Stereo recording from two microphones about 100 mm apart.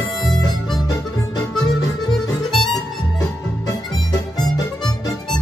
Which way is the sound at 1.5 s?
5° left (ahead or behind).